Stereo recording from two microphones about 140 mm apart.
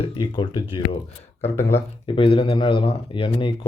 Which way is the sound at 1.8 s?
40° left (ahead or behind).